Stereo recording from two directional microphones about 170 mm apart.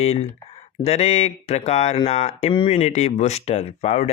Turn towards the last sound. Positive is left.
turn(degrees=40)  # may be behind; listen again after turning